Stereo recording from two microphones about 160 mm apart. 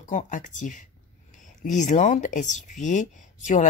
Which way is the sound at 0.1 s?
50° left (ahead or behind).